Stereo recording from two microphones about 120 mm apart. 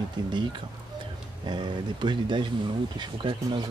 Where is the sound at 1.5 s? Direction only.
40° right (ahead or behind).